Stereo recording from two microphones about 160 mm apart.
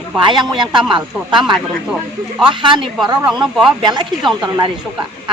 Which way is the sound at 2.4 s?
30° right (ahead or behind).